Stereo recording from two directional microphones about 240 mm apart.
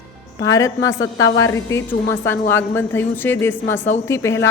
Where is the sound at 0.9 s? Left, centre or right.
Left.